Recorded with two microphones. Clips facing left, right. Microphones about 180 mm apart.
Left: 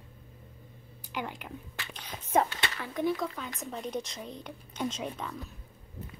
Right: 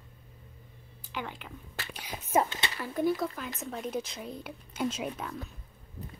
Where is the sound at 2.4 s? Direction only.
20° right (ahead or behind).